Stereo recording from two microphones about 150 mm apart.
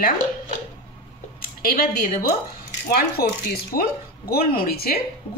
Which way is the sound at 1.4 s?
75° left (ahead or behind).